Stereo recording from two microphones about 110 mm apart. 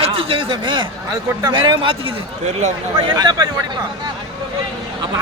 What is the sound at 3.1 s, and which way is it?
Speech, 35° right (ahead or behind).